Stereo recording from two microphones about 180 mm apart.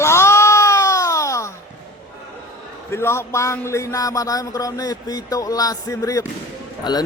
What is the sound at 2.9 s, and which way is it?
Speech, 15° left (ahead or behind).